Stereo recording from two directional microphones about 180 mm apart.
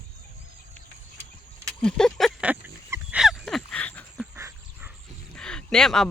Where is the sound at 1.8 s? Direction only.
5° left (ahead or behind).